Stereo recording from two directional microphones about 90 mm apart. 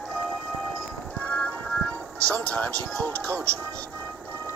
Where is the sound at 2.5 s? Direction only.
15° left (ahead or behind).